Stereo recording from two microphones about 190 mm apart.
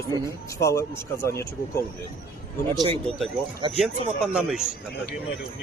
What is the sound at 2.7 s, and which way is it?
Speech, 25° right (ahead or behind).